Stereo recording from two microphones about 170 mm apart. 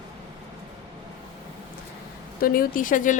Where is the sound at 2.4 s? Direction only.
55° left (ahead or behind).